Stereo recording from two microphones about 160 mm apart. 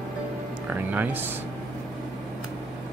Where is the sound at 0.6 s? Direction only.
10° right (ahead or behind).